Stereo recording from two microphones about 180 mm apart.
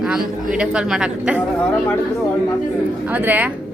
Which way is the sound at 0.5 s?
5° right (ahead or behind).